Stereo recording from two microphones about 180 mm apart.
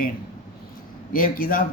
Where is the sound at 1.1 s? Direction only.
50° left (ahead or behind).